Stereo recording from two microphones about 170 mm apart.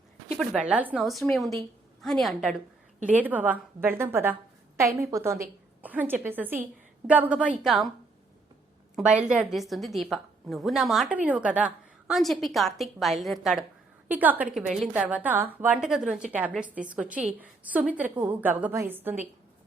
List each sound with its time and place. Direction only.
0.3 s a woman's voice: 5° right (ahead or behind)
9.0 s a woman's voice: 5° right (ahead or behind)